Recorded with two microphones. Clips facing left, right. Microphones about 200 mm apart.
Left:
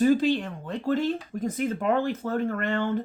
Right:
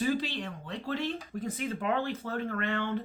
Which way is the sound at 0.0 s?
45° left (ahead or behind).